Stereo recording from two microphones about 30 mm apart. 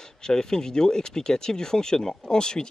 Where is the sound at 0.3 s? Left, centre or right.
Left.